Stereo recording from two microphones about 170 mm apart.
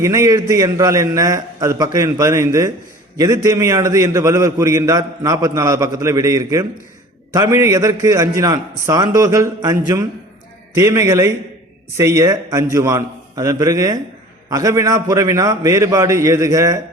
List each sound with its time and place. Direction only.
0.0 s a man's voice: 15° right (ahead or behind)